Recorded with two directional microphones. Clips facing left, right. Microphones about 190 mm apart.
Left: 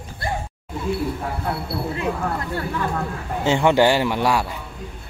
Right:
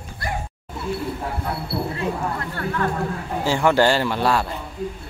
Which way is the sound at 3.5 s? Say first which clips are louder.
Left 1 dB; 20° left (ahead or behind).